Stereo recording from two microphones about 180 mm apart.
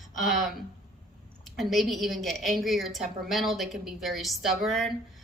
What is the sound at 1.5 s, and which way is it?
A woman's voice, centre (ahead or behind).